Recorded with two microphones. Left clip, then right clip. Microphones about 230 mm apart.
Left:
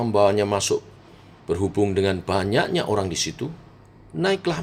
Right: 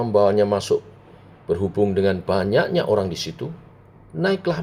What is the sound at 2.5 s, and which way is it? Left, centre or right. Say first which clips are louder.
Speech: right 4 dB; left.